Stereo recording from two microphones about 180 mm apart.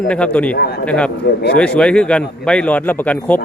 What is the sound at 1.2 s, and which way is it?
Speech, 65° left (ahead or behind).